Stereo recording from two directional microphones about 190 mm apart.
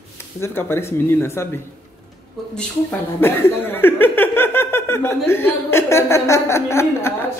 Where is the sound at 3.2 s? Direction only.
10° left (ahead or behind).